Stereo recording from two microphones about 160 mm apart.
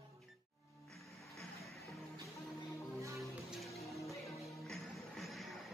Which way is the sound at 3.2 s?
Centre (ahead or behind).